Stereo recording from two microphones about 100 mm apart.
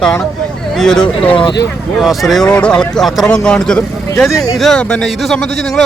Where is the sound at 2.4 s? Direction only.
10° left (ahead or behind).